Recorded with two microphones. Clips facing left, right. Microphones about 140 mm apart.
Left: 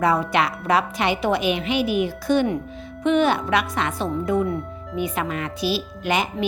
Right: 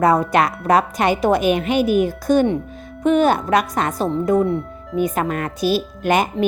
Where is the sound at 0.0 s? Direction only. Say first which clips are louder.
Right 4 dB; 45° right (ahead or behind).